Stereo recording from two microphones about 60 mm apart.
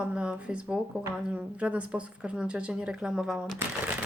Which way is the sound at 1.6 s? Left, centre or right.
Right.